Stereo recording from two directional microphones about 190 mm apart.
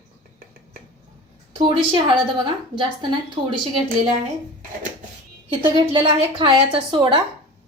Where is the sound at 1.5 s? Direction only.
25° right (ahead or behind).